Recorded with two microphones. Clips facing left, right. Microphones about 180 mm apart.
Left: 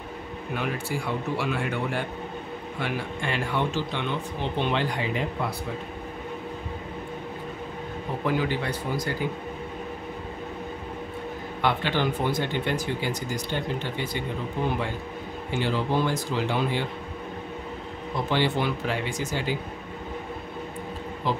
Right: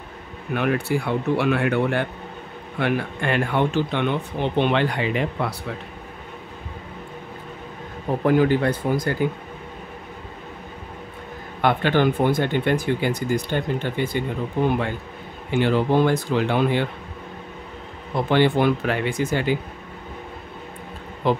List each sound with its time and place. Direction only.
0.6 s speech: 65° right (ahead or behind)
8.2 s speech: 50° right (ahead or behind)
11.6 s speech: 55° right (ahead or behind)
15.5 s speech: 60° right (ahead or behind)
18.3 s speech: 55° right (ahead or behind)
21.2 s speech: 60° right (ahead or behind)